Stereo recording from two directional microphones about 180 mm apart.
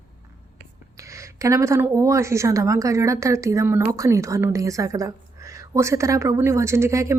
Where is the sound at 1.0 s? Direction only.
15° right (ahead or behind).